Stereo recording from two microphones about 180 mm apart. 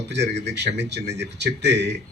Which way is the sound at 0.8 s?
70° right (ahead or behind).